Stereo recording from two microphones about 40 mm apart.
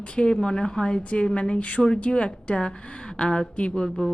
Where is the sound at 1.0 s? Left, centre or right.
Left.